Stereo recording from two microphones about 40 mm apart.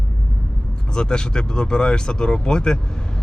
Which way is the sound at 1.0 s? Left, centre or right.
Left.